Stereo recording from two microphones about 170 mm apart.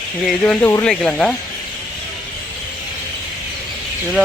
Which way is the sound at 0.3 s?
5° left (ahead or behind).